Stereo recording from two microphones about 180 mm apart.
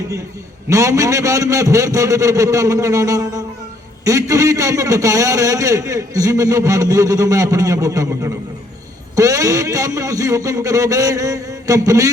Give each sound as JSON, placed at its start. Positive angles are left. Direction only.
{"t": 0.7, "sound": "a man's voice", "side_deg": -15}